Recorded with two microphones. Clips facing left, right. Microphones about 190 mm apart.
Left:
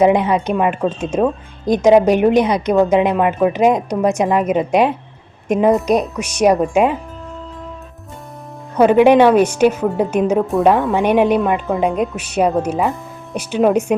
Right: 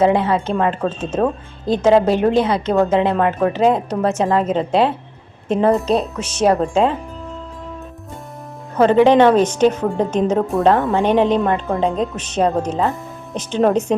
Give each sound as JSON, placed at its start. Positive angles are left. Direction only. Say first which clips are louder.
{"t": 0.0, "sound": "speech", "louder": "left 2 dB", "side_deg": 15}
{"t": 8.8, "sound": "speech", "louder": "left 2 dB", "side_deg": 10}